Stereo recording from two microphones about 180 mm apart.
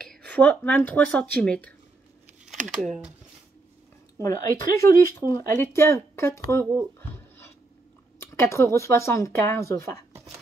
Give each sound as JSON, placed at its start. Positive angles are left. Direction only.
{"t": 0.1, "sound": "speech", "side_deg": 5}
{"t": 2.8, "sound": "speech", "side_deg": 0}
{"t": 4.2, "sound": "speech", "side_deg": 15}
{"t": 7.0, "sound": "a sound", "side_deg": 10}
{"t": 8.2, "sound": "speech", "side_deg": 15}